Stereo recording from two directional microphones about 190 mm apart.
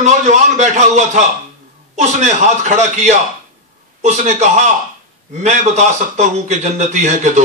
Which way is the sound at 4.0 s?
35° right (ahead or behind).